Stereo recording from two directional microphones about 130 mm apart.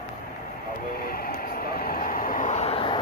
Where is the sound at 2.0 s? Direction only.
90° left; by 3.0 s 40° left (ahead or behind).